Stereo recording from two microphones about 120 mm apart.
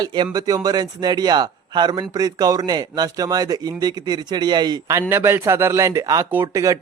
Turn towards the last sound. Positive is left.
turn(degrees=-25)  # may be behind; listen again after turning